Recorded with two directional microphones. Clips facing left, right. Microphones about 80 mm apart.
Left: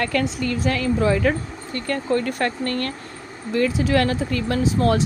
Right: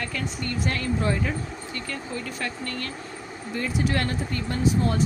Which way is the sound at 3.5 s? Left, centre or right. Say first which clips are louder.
Left 7 dB; left.